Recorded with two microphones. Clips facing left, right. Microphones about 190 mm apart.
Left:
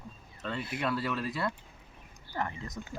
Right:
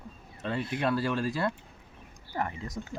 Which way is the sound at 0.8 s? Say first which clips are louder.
Right 4 dB; 30° right (ahead or behind).